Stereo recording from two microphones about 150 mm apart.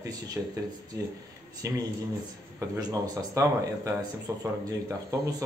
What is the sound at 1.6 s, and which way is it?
Speech, 20° right (ahead or behind).